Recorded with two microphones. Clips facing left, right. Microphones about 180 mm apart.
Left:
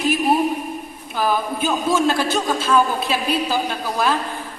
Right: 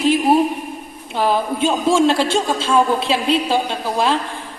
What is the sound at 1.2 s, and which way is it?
A man's voice, 25° right (ahead or behind).